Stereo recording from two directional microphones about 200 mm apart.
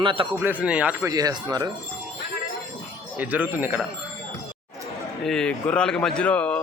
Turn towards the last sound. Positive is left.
turn(degrees=5)  # may be behind; listen again after turning